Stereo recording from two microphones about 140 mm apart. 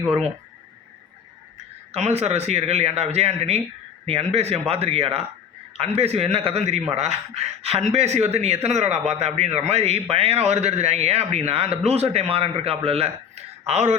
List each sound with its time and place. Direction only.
1.9 s a man's voice: 50° right (ahead or behind)